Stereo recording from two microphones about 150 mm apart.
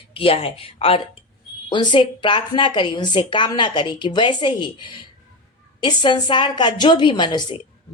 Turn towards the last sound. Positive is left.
turn(degrees=30)  # may be behind; listen again after turning